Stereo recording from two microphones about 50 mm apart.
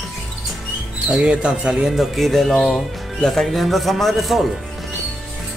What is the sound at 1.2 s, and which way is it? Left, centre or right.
Speech, centre.